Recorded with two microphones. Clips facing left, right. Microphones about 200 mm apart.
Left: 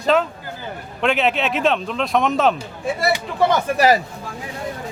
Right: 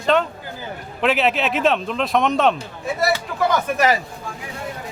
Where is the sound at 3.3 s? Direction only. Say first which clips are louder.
Left 3 dB; 35° left (ahead or behind).